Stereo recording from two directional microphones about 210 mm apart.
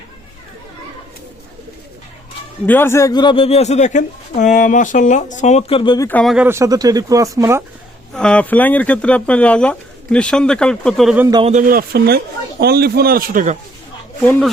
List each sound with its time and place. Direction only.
2.6 s speech: 10° left (ahead or behind)
6.1 s speech: 5° left (ahead or behind)
6.3 s speech: 10° right (ahead or behind)
8.1 s speech: 5° left (ahead or behind)
11.3 s a man's voice: 20° right (ahead or behind)
11.5 s speech: 45° right (ahead or behind)
14.3 s speech: 5° left (ahead or behind)